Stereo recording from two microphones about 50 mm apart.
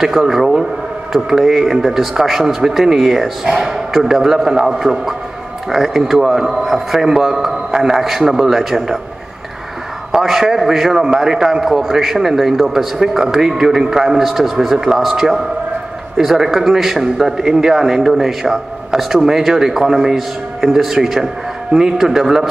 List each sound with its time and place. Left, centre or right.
0.0 s a man's voice: centre
10.1 s a man's voice: centre